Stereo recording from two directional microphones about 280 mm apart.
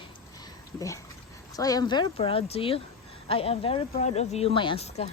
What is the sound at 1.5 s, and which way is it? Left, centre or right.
Speech, centre.